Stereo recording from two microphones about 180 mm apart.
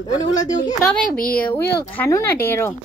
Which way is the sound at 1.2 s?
10° left (ahead or behind).